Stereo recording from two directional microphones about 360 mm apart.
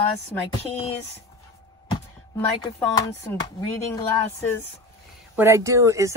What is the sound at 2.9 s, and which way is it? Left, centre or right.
Speech, centre.